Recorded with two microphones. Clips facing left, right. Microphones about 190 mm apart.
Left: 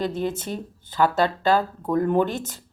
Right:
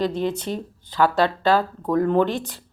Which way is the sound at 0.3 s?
50° left (ahead or behind).